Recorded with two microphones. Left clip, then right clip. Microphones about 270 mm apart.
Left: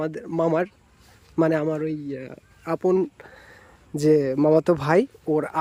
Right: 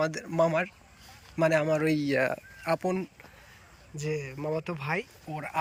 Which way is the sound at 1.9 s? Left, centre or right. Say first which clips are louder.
Right 3 dB; right.